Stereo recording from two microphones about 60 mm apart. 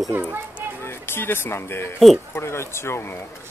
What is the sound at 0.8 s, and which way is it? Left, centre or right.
Speech, left.